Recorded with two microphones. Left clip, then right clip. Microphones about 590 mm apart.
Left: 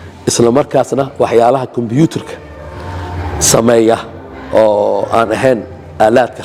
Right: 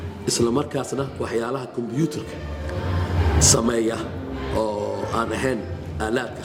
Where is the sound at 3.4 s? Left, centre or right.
Left.